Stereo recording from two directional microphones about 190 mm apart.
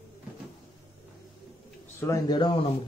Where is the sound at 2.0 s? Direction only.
20° left (ahead or behind).